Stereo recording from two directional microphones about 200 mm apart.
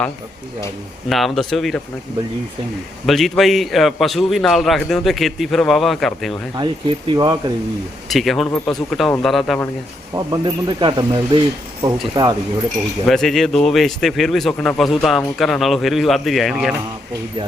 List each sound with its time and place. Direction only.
1.1 s speech: centre (ahead or behind)
3.1 s speech: centre (ahead or behind)
6.6 s speech: 25° right (ahead or behind)
8.1 s speech: centre (ahead or behind)
10.2 s speech: 20° right (ahead or behind)
13.1 s speech: centre (ahead or behind)